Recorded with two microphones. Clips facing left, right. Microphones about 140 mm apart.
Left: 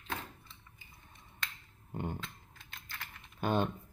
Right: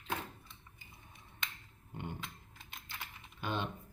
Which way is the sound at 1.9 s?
45° left (ahead or behind).